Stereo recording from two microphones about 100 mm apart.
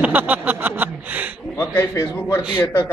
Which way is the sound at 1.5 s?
30° left (ahead or behind).